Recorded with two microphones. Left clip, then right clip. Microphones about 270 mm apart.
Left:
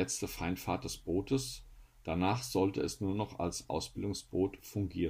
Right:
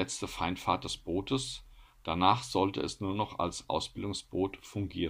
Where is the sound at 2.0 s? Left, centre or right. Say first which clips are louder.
Right 7 dB; right.